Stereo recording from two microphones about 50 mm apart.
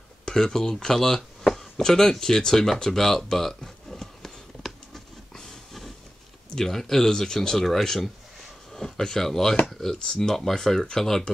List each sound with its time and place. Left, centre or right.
0.2 s speech: centre
1.8 s a sound: centre
6.5 s speech: centre